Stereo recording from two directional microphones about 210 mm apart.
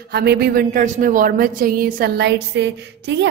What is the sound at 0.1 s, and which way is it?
A woman's voice, 50° right (ahead or behind).